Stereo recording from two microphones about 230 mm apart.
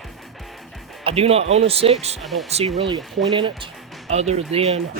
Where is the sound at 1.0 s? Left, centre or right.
Right.